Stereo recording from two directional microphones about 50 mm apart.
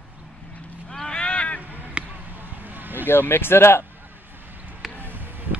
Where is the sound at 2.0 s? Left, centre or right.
Centre.